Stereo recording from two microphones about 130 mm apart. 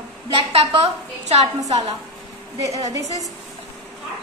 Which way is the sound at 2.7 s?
25° right (ahead or behind).